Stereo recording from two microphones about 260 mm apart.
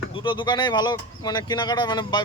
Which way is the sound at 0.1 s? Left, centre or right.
Centre.